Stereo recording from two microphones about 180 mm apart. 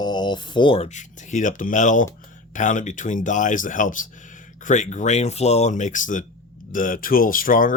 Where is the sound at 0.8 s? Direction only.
40° left (ahead or behind).